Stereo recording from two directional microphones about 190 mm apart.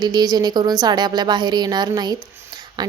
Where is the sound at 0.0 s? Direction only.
20° right (ahead or behind).